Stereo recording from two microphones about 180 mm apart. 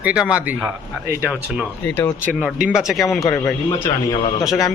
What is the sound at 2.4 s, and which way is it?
Speech, 5° right (ahead or behind).